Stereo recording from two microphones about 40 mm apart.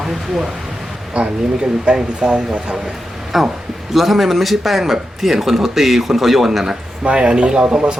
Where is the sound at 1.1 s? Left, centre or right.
Right.